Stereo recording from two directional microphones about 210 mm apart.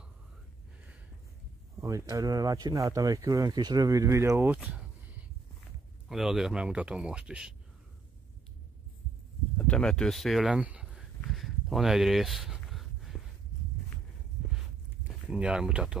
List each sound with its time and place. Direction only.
1.8 s speech: 15° right (ahead or behind)
9.6 s speech: 5° left (ahead or behind)
11.2 s a sound: centre (ahead or behind)
15.2 s speech: 5° right (ahead or behind)